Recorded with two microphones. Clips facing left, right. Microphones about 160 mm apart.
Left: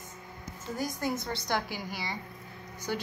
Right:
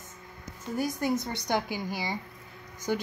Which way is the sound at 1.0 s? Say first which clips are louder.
Right 3 dB; 20° right (ahead or behind).